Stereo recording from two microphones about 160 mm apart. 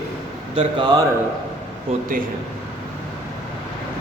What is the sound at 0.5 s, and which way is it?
Speech, 30° right (ahead or behind).